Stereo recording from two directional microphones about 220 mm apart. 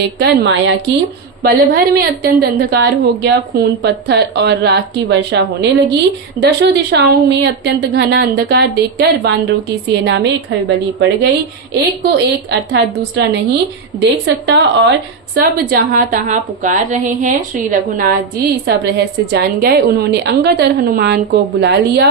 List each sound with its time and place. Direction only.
0.0 s a woman's voice: 50° right (ahead or behind)
1.4 s a woman's voice: 45° right (ahead or behind)
11.7 s a woman's voice: 50° right (ahead or behind)
15.4 s a woman's voice: 40° right (ahead or behind)